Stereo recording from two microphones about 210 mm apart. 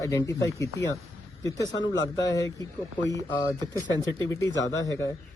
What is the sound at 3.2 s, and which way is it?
Speech, 15° left (ahead or behind).